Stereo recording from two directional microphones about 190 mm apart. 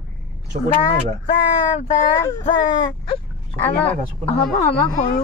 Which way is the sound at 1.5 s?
40° left (ahead or behind).